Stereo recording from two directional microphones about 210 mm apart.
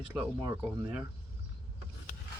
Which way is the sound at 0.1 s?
5° right (ahead or behind).